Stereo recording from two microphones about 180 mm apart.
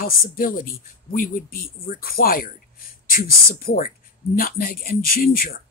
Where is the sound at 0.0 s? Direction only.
50° left (ahead or behind).